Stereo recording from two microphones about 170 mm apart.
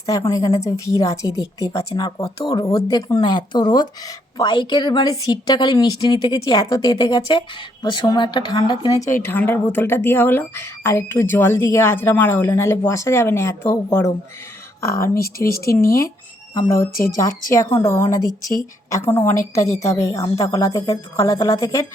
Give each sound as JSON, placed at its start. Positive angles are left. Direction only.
{"t": 0.0, "sound": "a woman's voice", "side_deg": 20}